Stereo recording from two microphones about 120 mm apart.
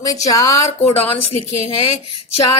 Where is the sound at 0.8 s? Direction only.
50° left (ahead or behind).